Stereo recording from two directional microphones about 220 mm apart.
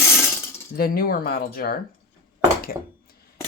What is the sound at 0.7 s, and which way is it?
Speech, 45° left (ahead or behind).